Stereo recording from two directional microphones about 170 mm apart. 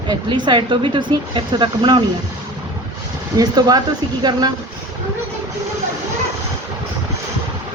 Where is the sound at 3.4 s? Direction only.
20° right (ahead or behind).